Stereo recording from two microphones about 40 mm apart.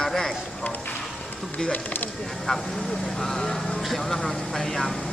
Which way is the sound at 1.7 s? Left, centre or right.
Left.